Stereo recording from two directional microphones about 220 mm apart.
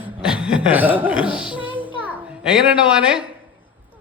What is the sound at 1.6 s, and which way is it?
Music, 25° left (ahead or behind).